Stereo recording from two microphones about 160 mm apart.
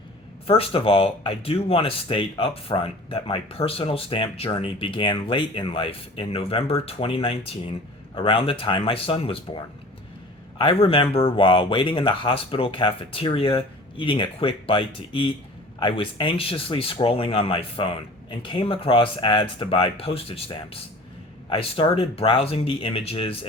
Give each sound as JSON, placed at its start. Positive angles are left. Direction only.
{"t": 0.4, "sound": "speech", "side_deg": 35}